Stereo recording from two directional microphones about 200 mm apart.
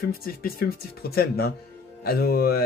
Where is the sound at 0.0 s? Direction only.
45° left (ahead or behind).